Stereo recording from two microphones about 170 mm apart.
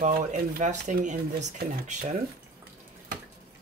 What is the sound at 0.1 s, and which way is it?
Speech, 50° right (ahead or behind).